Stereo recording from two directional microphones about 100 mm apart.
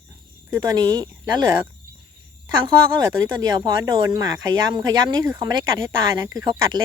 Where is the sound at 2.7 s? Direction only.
50° right (ahead or behind).